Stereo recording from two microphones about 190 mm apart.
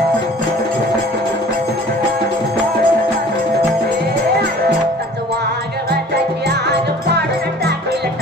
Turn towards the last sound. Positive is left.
turn(degrees=-60)  # may be behind; listen again after turning